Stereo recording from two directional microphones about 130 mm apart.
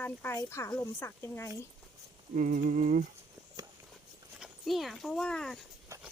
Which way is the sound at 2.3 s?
90° right.